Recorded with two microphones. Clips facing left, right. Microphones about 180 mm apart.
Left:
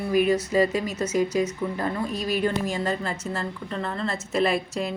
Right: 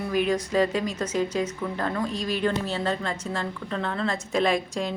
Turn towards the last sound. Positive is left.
turn(degrees=5)  # may be behind; listen again after turning